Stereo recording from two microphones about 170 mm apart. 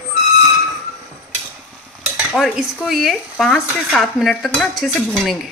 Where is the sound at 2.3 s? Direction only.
Centre (ahead or behind).